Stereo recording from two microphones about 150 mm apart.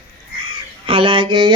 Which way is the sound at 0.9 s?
35° right (ahead or behind).